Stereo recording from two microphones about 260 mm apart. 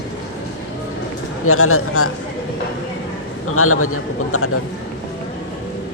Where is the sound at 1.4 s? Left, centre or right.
Left.